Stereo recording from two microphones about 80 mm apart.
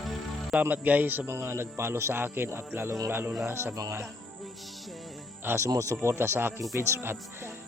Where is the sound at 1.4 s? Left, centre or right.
Right.